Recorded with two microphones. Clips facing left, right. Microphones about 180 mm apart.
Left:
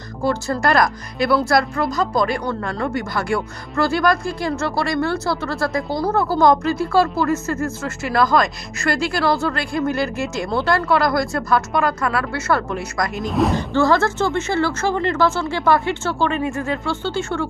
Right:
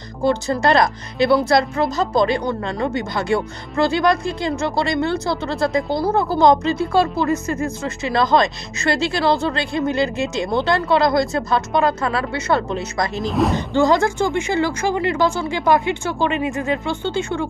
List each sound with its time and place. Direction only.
0.2 s speech: 20° right (ahead or behind)
13.2 s speech: centre (ahead or behind)
13.6 s speech: 15° right (ahead or behind)